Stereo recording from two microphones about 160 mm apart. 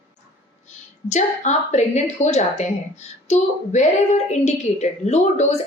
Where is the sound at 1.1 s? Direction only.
45° left (ahead or behind).